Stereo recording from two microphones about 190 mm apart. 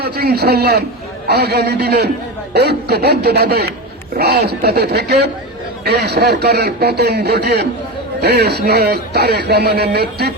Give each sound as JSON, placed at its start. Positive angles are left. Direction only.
{"t": 0.0, "sound": "a man's voice", "side_deg": -55}